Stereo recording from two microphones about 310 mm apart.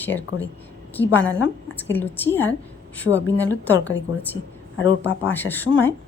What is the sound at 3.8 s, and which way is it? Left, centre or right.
Speech, left.